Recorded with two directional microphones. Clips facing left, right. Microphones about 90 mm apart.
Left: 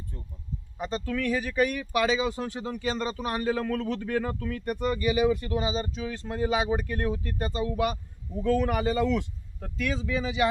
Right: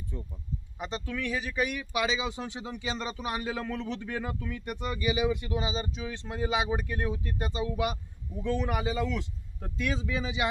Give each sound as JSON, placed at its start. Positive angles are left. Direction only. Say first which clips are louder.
{"t": 0.8, "sound": "speech", "louder": "left 5 dB", "side_deg": -15}
{"t": 1.3, "sound": "speech", "louder": "left 5 dB", "side_deg": -5}
{"t": 8.3, "sound": "speech", "louder": "left 5 dB", "side_deg": -5}
{"t": 9.6, "sound": "speech", "louder": "left 2 dB", "side_deg": -25}